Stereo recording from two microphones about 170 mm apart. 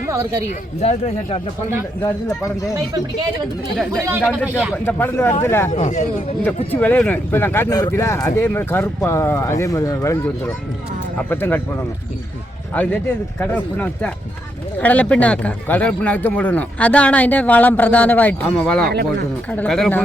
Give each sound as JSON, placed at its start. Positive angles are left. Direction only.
{"t": 0.1, "sound": "speech", "side_deg": -15}
{"t": 0.8, "sound": "speech", "side_deg": 35}
{"t": 2.0, "sound": "speech", "side_deg": 15}
{"t": 4.2, "sound": "speech", "side_deg": 0}
{"t": 4.9, "sound": "speech", "side_deg": 10}
{"t": 5.7, "sound": "speech", "side_deg": 45}
{"t": 6.7, "sound": "speech", "side_deg": 10}
{"t": 12.7, "sound": "speech", "side_deg": 10}